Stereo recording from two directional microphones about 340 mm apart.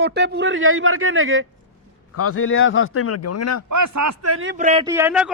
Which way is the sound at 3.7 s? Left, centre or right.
Right.